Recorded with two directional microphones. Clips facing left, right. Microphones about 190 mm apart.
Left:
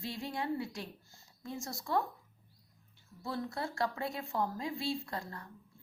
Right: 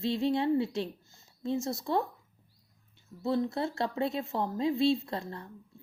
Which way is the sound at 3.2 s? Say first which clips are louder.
Right 8 dB; 25° right (ahead or behind).